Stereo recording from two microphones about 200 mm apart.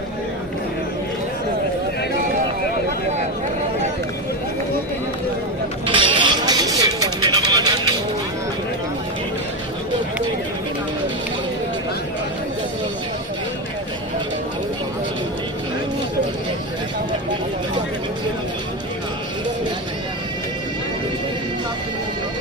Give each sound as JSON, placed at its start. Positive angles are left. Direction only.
{"t": 5.8, "sound": "music", "side_deg": -25}